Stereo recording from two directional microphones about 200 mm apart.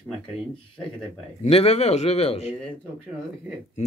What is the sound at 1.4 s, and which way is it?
Speech, 30° left (ahead or behind).